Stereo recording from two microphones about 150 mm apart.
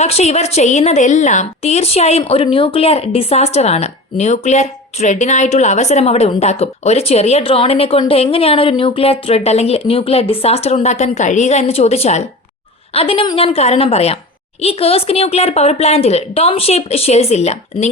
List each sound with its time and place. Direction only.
0.0 s a woman's voice: 45° left (ahead or behind)